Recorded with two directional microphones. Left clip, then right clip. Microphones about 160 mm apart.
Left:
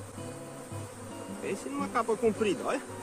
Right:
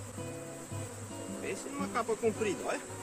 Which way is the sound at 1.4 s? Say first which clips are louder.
Left 5 dB; 20° left (ahead or behind).